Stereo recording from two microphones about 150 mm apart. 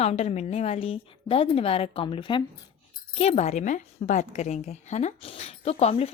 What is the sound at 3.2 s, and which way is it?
Speech, 45° left (ahead or behind).